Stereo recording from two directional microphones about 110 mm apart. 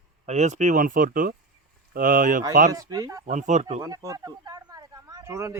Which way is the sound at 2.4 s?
35° right (ahead or behind).